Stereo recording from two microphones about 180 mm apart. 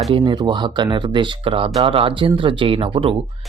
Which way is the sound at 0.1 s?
30° right (ahead or behind).